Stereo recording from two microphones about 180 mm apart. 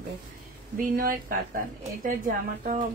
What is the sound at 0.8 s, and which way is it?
A woman's voice, 50° right (ahead or behind).